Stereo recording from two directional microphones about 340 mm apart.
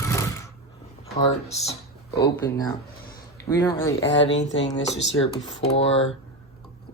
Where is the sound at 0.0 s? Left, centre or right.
Centre.